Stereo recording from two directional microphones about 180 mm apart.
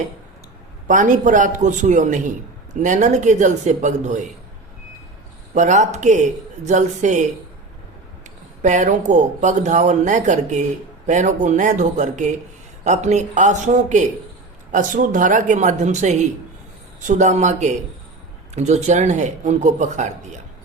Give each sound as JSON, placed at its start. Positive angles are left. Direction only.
{"t": 0.9, "sound": "speech", "side_deg": -45}
{"t": 5.5, "sound": "speech", "side_deg": -40}
{"t": 8.6, "sound": "speech", "side_deg": -40}